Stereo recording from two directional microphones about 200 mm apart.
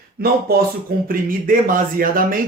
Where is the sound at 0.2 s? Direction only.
50° right (ahead or behind).